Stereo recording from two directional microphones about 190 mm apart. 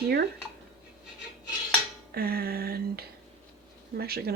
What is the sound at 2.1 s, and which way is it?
Speech, 55° right (ahead or behind).